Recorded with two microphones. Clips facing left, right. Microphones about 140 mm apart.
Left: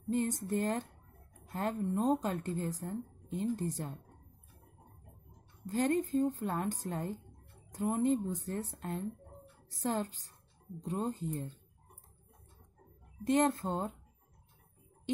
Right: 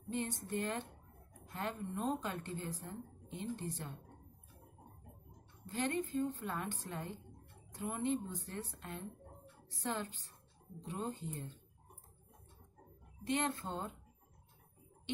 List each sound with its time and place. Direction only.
0.1 s a woman's voice: 40° left (ahead or behind)
5.7 s a woman's voice: 40° left (ahead or behind)
13.2 s a woman's voice: 40° left (ahead or behind)